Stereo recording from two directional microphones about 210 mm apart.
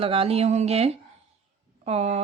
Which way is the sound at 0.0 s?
25° right (ahead or behind).